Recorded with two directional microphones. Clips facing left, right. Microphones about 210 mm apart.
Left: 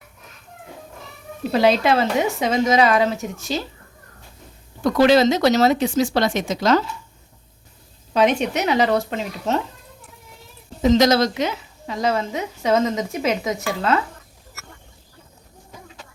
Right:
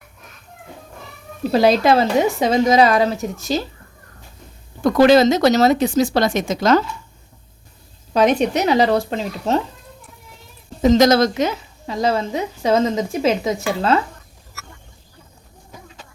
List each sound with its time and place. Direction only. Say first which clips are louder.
1.5 s a woman's voice: right 3 dB; 40° right (ahead or behind)
4.8 s speech: right 3 dB; 50° right (ahead or behind)
8.1 s a woman's voice: right 3 dB; 40° right (ahead or behind)
10.8 s a woman's voice: right 3 dB; 50° right (ahead or behind); by 14.0 s 30° right (ahead or behind)